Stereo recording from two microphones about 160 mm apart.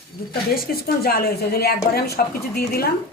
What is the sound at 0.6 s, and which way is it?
A woman's voice, 70° left (ahead or behind).